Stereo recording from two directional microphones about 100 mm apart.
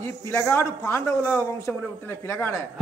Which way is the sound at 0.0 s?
30° left (ahead or behind).